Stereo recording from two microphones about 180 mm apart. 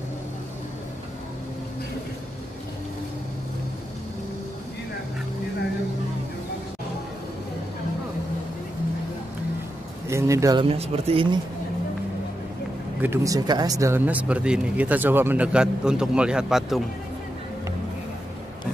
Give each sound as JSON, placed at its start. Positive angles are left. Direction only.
{"t": 10.0, "sound": "speech", "side_deg": -15}
{"t": 13.0, "sound": "speech", "side_deg": -15}